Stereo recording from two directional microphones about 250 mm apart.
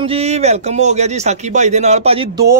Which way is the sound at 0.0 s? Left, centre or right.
Right.